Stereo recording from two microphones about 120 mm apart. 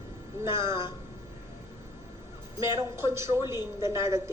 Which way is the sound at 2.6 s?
25° right (ahead or behind).